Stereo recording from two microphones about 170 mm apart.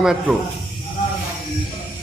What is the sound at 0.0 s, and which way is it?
Speech, 5° right (ahead or behind).